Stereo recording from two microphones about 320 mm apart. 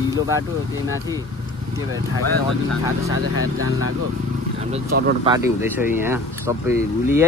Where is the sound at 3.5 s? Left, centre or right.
Right.